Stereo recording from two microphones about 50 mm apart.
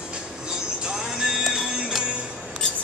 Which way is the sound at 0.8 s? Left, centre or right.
Centre.